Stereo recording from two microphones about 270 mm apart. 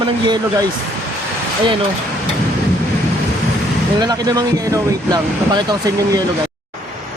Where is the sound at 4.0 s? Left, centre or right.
Centre.